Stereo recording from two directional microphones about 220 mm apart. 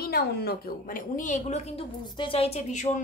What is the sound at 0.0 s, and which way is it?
A woman's voice, 45° left (ahead or behind).